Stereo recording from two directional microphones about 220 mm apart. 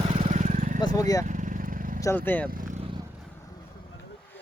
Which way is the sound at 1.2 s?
35° right (ahead or behind).